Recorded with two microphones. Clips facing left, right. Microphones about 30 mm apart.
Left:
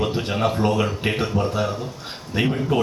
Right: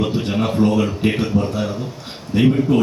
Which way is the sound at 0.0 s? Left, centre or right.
Centre.